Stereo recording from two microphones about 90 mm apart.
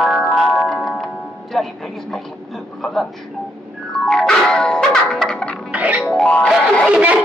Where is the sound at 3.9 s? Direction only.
10° left (ahead or behind).